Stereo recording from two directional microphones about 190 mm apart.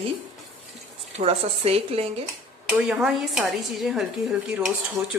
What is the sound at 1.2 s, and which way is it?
Speech, 30° right (ahead or behind).